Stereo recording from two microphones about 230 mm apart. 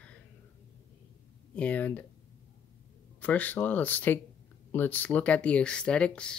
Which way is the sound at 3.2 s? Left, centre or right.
Centre.